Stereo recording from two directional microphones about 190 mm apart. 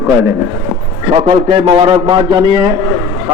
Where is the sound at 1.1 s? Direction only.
30° right (ahead or behind).